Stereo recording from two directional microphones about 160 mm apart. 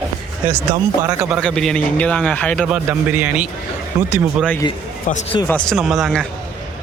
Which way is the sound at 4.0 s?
20° right (ahead or behind).